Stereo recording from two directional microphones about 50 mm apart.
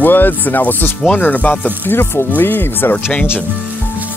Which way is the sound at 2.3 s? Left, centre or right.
Left.